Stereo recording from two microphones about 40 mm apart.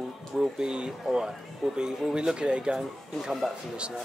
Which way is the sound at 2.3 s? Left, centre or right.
Right.